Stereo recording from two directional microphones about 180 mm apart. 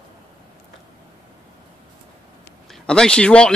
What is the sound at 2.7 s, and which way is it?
Speech, 5° left (ahead or behind).